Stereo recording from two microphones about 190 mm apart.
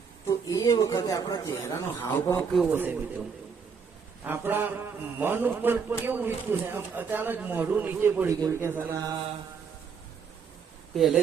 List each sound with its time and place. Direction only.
0.3 s speech: 20° left (ahead or behind)
2.7 s a man's voice: 10° right (ahead or behind)
4.2 s a man's voice: 10° right (ahead or behind)
10.9 s speech: centre (ahead or behind)